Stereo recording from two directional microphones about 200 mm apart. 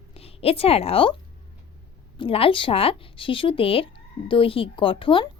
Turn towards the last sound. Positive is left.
turn(degrees=25)  # may be behind; listen again after turning